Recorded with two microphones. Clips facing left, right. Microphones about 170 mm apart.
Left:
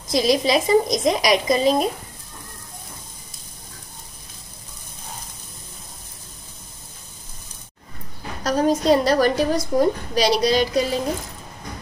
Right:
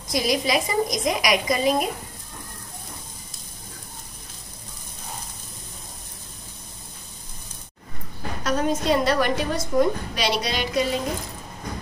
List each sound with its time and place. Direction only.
0.1 s a woman's voice: 25° left (ahead or behind)
8.5 s a woman's voice: 35° left (ahead or behind)